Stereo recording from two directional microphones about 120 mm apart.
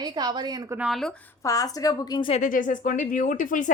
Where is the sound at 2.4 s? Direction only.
90° left.